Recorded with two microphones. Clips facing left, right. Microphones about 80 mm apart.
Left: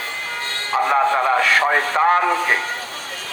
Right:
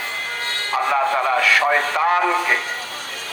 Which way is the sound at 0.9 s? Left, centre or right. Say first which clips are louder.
Left 2 dB; left.